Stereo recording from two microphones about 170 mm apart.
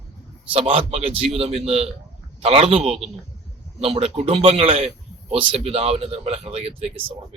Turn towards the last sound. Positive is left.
turn(degrees=-35)  # may be behind; listen again after turning